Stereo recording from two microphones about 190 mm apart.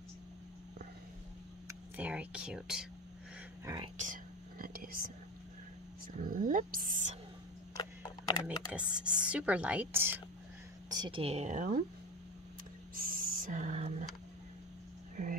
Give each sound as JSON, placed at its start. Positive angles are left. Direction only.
{"t": 1.7, "sound": "speech", "side_deg": -10}
{"t": 3.6, "sound": "speech", "side_deg": -20}
{"t": 4.0, "sound": "whispering", "side_deg": -45}
{"t": 6.1, "sound": "speech", "side_deg": -45}
{"t": 7.7, "sound": "a sound", "side_deg": 20}
{"t": 8.7, "sound": "a woman's voice", "side_deg": -5}
{"t": 10.9, "sound": "speech", "side_deg": -25}
{"t": 12.9, "sound": "speech", "side_deg": -50}